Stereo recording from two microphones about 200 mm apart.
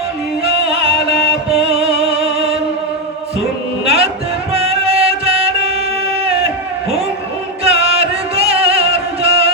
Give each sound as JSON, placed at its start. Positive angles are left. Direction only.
{"t": 0.4, "sound": "music", "side_deg": -30}
{"t": 3.8, "sound": "music", "side_deg": -30}
{"t": 7.6, "sound": "music", "side_deg": -30}